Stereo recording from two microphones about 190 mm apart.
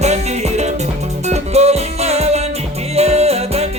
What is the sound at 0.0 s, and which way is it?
Music, 35° right (ahead or behind).